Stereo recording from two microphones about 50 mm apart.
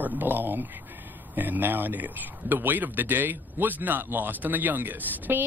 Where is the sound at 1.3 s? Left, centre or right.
Right.